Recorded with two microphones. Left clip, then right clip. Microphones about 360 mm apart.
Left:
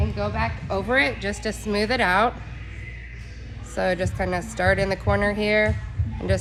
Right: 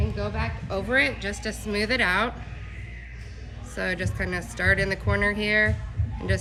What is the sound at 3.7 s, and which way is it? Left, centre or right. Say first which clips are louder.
Speech: left 5 dB; centre.